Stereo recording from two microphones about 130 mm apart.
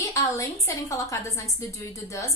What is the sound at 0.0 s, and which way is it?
Speech, 25° left (ahead or behind).